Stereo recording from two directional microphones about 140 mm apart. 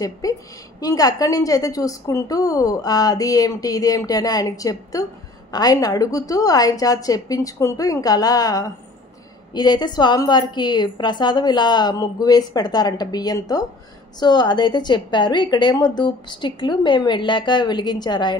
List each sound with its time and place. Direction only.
0.0 s a woman's voice: 25° left (ahead or behind)